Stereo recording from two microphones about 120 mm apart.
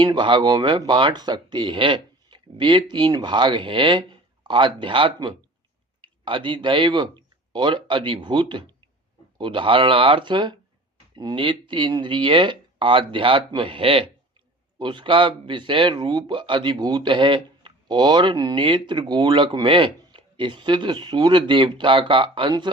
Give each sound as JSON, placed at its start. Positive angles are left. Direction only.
{"t": 0.0, "sound": "speech", "side_deg": -40}